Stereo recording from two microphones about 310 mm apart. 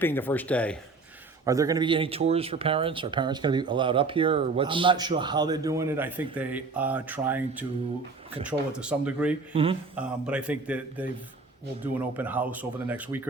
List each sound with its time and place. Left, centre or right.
0.0 s speech: centre
1.5 s speech: centre
9.5 s speech: centre
9.9 s speech: centre
12.1 s speech: centre